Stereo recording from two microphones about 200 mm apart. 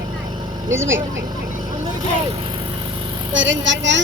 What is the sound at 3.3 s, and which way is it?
Speech, 65° right (ahead or behind).